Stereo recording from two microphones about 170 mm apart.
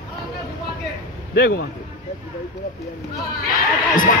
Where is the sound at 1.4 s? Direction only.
65° left (ahead or behind).